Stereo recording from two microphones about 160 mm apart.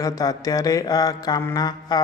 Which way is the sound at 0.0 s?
20° left (ahead or behind).